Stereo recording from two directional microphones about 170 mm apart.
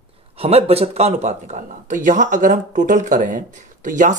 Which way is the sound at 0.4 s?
35° right (ahead or behind).